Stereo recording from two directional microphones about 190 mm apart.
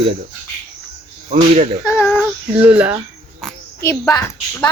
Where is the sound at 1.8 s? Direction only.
15° left (ahead or behind).